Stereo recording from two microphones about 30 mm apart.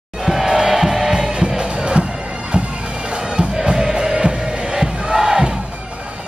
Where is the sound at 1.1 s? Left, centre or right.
Right.